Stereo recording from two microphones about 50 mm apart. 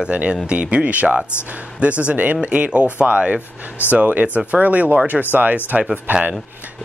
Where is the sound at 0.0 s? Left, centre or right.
Right.